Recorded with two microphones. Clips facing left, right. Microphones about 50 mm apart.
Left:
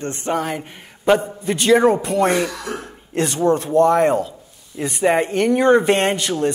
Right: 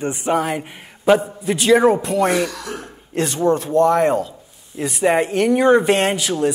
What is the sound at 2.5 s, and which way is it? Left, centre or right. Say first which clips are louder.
Speech: left 2 dB; left.